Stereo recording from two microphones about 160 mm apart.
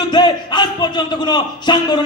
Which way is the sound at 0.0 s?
25° left (ahead or behind).